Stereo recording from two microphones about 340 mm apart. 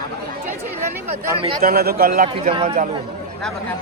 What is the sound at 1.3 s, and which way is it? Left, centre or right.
Speech, centre.